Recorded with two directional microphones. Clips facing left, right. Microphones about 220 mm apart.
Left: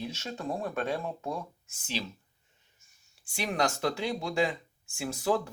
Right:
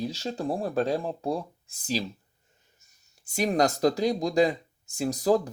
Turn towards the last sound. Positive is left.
turn(degrees=-40)  # may be behind; listen again after turning